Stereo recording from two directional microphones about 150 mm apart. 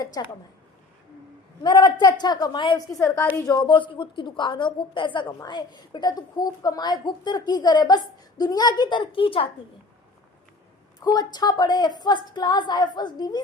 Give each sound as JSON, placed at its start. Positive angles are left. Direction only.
{"t": 0.0, "sound": "a woman's voice", "side_deg": 25}
{"t": 1.6, "sound": "a woman's voice", "side_deg": 25}
{"t": 11.0, "sound": "a woman's voice", "side_deg": 25}